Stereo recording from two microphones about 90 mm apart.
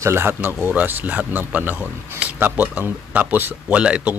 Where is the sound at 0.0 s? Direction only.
30° right (ahead or behind).